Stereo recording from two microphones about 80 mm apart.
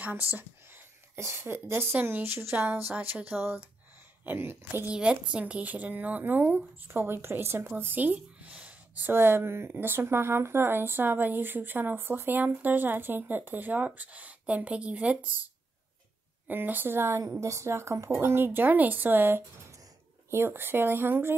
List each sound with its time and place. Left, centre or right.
0.0 s speech: right
4.8 s a woman's voice: centre
16.4 s speech: right